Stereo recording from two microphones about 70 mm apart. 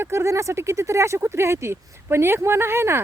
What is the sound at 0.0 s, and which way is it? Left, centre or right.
Speech, right.